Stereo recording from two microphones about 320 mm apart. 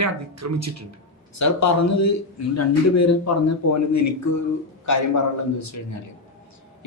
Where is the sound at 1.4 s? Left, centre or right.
Left.